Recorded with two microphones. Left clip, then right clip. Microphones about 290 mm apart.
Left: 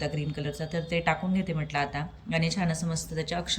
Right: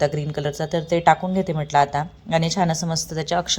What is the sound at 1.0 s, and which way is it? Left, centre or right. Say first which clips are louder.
Speech: right 11 dB; right.